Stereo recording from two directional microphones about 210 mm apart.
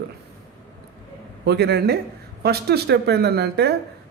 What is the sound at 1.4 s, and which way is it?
Speech, 50° right (ahead or behind).